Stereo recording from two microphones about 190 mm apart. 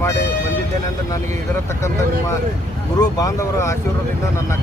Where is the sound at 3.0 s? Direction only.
20° left (ahead or behind).